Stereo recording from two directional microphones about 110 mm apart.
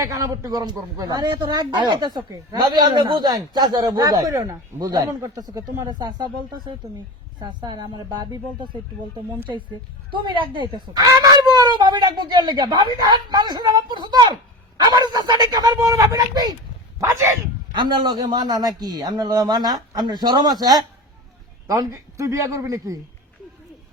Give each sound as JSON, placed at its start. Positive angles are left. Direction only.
{"t": 0.0, "sound": "a man's voice", "side_deg": -30}
{"t": 10.1, "sound": "speech", "side_deg": -45}
{"t": 10.9, "sound": "a man's voice", "side_deg": -35}
{"t": 17.7, "sound": "a man's voice", "side_deg": -45}